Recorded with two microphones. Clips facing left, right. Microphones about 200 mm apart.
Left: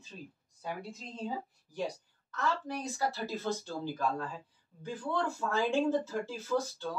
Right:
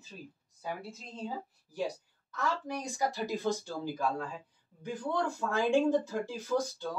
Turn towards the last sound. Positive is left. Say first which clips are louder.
# right 1 dB
turn(degrees=-15)  # may be behind; listen again after turning